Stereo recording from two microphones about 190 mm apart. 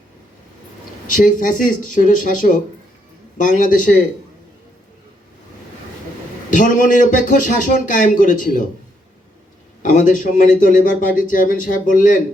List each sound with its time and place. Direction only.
1.1 s a man's voice: 45° left (ahead or behind)
6.5 s a man's voice: 45° left (ahead or behind)
9.8 s a man's voice: 45° left (ahead or behind)